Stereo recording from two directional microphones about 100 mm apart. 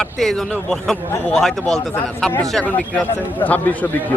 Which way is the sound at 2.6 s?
15° left (ahead or behind).